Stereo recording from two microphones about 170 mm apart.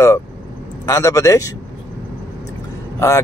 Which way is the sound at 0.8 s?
20° left (ahead or behind).